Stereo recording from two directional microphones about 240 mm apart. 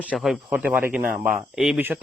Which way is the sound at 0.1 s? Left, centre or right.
Centre.